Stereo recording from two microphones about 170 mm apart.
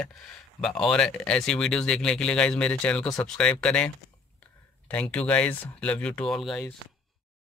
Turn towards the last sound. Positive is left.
turn(degrees=0)  # may be behind; listen again after turning